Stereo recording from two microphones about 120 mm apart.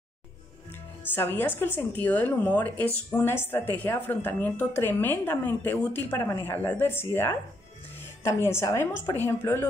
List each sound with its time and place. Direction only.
1.1 s a woman's voice: 15° left (ahead or behind)